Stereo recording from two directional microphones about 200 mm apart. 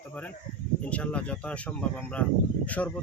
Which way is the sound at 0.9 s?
5° left (ahead or behind).